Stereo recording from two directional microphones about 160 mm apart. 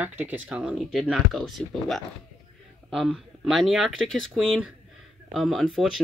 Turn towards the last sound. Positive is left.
turn(degrees=0)  # may be behind; listen again after turning